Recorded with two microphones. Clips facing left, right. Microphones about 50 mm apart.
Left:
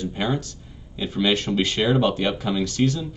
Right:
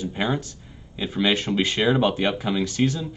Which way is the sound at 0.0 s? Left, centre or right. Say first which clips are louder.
Even; centre.